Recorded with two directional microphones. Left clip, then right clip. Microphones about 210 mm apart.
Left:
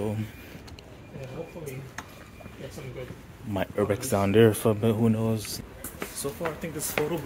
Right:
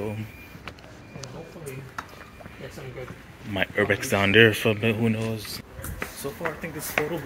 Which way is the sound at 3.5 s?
5° left (ahead or behind).